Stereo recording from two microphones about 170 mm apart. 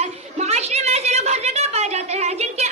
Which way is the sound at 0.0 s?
40° right (ahead or behind).